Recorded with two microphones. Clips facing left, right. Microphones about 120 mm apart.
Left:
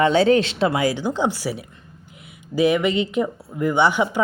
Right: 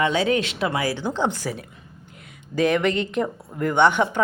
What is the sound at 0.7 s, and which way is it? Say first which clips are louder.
Speech: left 3 dB; 20° left (ahead or behind).